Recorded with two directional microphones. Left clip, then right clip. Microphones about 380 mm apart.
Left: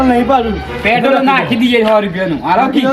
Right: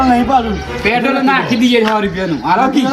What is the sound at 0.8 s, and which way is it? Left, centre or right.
A man's voice, centre.